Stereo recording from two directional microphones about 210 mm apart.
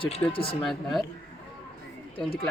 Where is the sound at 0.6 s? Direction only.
Centre (ahead or behind).